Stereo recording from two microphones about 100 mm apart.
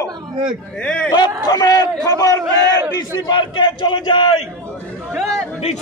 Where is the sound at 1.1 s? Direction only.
40° left (ahead or behind).